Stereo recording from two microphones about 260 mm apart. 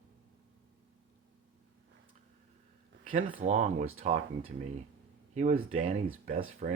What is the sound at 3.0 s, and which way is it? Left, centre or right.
Speech, right.